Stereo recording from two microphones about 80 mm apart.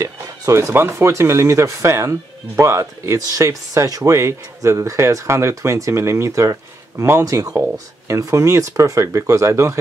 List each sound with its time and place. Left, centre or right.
0.0 s speech: right